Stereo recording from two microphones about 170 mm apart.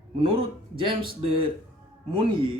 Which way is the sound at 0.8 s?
30° right (ahead or behind).